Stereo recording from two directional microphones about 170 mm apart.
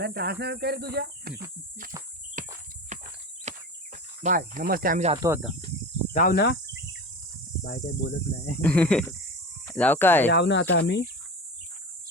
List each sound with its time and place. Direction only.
0.0 s speech: 70° right (ahead or behind)
2.4 s cricket: 50° right (ahead or behind)
2.9 s a sound: 45° right (ahead or behind)
3.5 s cricket: 40° right (ahead or behind)
4.2 s speech: 50° right (ahead or behind)
5.2 s speech: 20° right (ahead or behind)
6.1 s speech: 60° left (ahead or behind)
7.9 s speech: 55° left (ahead or behind)
8.6 s speech: 5° left (ahead or behind)
10.2 s speech: 90° left